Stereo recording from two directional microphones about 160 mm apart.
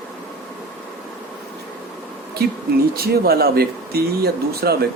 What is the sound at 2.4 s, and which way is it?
Speech, 80° right.